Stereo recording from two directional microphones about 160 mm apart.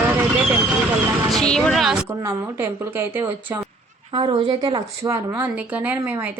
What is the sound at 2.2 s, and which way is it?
Speech, 15° right (ahead or behind).